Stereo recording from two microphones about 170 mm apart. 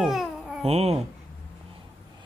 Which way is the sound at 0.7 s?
35° right (ahead or behind).